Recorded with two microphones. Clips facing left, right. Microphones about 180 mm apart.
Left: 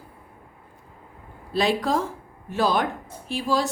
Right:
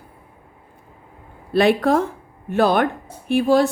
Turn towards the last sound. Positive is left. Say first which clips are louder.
# right 9 dB
turn(degrees=-55)  # may be behind; listen again after turning